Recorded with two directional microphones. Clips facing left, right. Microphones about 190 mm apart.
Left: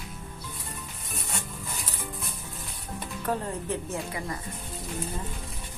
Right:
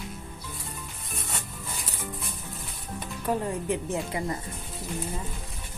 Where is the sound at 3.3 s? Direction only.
15° right (ahead or behind).